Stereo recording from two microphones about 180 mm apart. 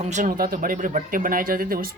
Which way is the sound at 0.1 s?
45° right (ahead or behind).